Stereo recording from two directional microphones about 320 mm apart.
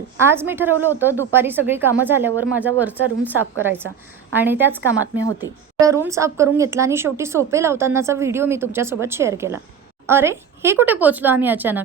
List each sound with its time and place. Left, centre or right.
0.3 s a woman's voice: centre